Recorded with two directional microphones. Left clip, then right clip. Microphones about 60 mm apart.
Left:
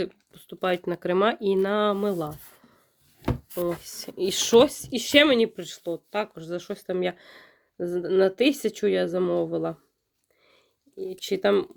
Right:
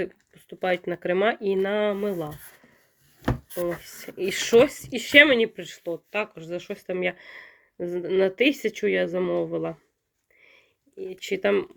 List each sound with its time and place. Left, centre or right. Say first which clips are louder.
0.6 s speech: right 1 dB; left
1.0 s speech: left 1 dB; left
3.5 s speech: even; left
4.2 s speech: even; left
10.4 s a sound: right 5 dB; left